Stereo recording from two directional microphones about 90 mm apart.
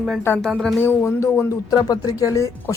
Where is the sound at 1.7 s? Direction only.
40° left (ahead or behind).